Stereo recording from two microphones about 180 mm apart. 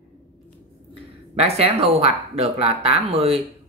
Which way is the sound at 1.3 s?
35° right (ahead or behind).